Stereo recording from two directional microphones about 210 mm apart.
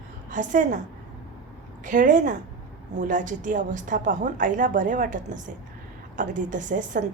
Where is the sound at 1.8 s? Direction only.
40° right (ahead or behind).